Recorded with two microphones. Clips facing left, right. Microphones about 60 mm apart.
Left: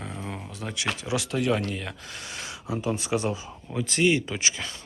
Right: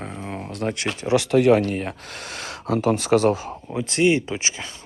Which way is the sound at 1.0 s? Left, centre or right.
Right.